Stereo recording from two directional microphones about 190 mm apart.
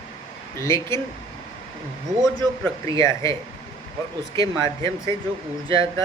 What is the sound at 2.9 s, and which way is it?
Speech, 15° left (ahead or behind).